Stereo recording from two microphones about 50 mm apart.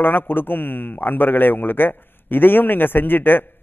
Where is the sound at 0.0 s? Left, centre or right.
Left.